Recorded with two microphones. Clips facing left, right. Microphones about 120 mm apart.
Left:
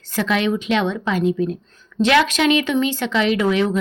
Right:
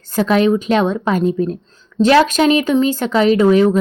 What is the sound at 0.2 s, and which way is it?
Speech, 40° right (ahead or behind).